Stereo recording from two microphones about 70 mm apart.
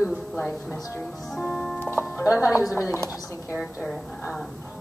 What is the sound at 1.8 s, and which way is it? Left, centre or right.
Music, left.